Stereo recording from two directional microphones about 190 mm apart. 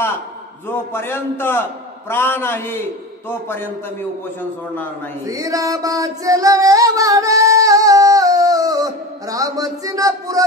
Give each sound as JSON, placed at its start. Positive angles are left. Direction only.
{"t": 0.7, "sound": "a man's voice", "side_deg": 10}
{"t": 5.3, "sound": "singing", "side_deg": -15}